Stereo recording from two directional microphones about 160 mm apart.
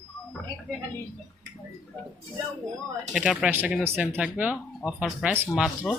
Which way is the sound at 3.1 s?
5° right (ahead or behind).